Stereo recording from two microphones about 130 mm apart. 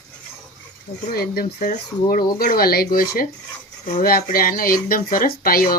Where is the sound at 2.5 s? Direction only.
90° left.